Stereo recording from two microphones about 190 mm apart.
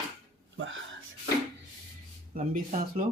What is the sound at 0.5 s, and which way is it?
Speech, 90° right.